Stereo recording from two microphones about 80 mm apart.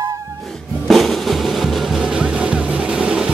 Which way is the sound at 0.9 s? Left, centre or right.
Centre.